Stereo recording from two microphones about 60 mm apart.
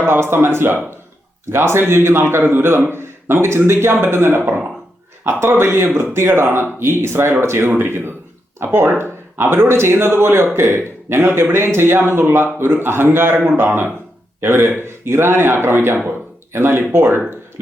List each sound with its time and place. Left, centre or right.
0.0 s speech: right
5.4 s speech: right
16.0 s a sound: right
16.9 s speech: right